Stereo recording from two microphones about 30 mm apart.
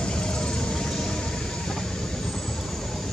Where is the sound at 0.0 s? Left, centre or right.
Left.